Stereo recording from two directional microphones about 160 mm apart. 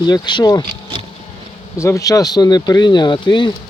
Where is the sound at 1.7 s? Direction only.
20° left (ahead or behind).